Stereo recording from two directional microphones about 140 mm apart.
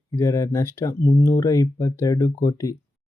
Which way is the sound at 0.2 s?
20° left (ahead or behind).